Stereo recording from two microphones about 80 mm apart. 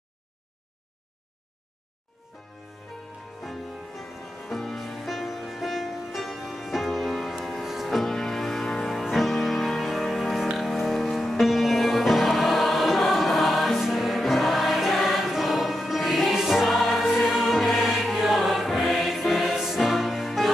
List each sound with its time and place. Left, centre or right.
3.4 s music: centre